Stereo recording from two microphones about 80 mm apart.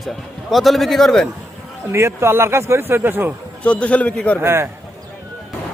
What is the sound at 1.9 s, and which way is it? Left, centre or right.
Speech, right.